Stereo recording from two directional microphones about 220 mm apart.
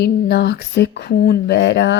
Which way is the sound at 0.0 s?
50° left (ahead or behind).